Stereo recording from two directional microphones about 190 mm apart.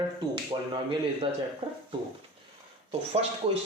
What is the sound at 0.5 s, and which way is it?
Speech, 25° right (ahead or behind).